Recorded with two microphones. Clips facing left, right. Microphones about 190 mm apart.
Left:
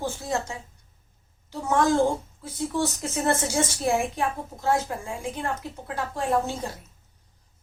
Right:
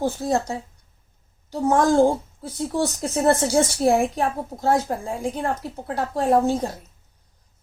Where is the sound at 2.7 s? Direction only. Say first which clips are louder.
Right 3 dB; 35° right (ahead or behind).